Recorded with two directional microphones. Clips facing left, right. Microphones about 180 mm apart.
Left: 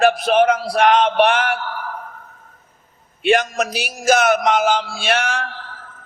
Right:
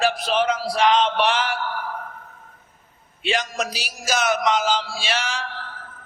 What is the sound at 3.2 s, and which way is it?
A man's voice, 55° left (ahead or behind).